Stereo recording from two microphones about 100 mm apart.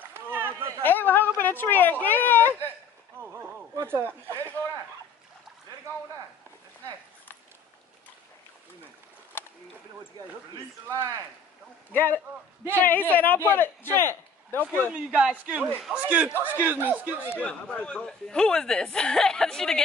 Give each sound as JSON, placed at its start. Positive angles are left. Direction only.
{"t": 0.0, "sound": "a sound", "side_deg": -20}
{"t": 0.8, "sound": "a man's voice", "side_deg": 20}
{"t": 3.2, "sound": "horse", "side_deg": -20}
{"t": 3.8, "sound": "speech", "side_deg": -25}
{"t": 10.9, "sound": "speech", "side_deg": -35}
{"t": 11.9, "sound": "a man's voice", "side_deg": 20}
{"t": 14.8, "sound": "a man's voice", "side_deg": -15}
{"t": 17.4, "sound": "speech", "side_deg": 10}